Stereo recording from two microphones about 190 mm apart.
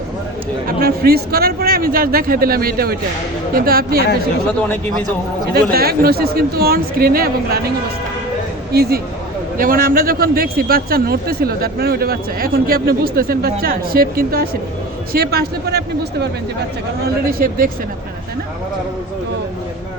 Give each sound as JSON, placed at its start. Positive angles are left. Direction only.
{"t": 0.8, "sound": "a man's voice", "side_deg": -55}
{"t": 5.7, "sound": "a man's voice", "side_deg": -55}
{"t": 8.7, "sound": "a man's voice", "side_deg": -55}
{"t": 17.3, "sound": "a man's voice", "side_deg": -50}